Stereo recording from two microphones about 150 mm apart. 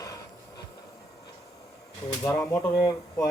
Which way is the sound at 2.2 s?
15° left (ahead or behind).